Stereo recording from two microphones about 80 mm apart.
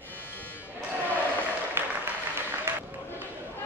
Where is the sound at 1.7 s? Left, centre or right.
Right.